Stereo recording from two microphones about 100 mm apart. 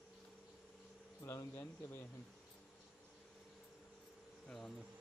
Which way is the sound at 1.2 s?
25° left (ahead or behind).